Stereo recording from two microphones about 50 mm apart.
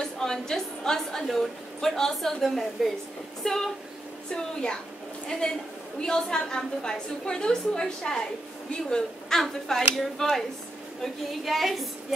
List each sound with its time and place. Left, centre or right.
0.0 s a woman's voice: centre